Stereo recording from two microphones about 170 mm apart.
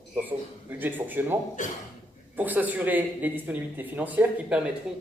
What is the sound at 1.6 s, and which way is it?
Speech, 50° left (ahead or behind).